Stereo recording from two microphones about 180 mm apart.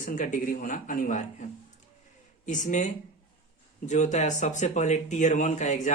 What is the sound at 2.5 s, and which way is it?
Speech, 45° left (ahead or behind).